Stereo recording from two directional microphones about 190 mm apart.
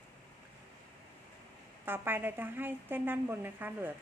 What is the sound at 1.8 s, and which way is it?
A woman's voice, 10° right (ahead or behind).